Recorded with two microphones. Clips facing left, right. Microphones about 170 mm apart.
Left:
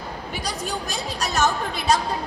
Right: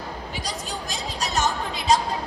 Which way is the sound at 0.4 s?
65° left (ahead or behind).